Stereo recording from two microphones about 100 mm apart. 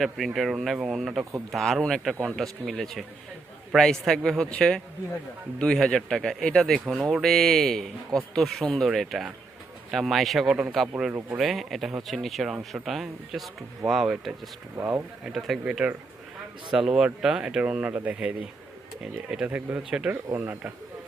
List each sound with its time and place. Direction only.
0.0 s speech: centre (ahead or behind)
15.6 s speech: 15° right (ahead or behind)